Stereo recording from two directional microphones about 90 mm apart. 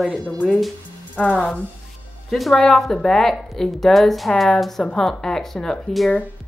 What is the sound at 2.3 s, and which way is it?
A woman's voice, centre (ahead or behind).